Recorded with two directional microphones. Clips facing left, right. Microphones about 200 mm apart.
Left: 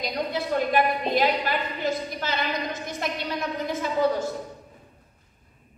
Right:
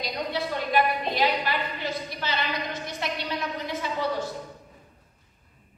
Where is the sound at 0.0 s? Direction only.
45° left (ahead or behind).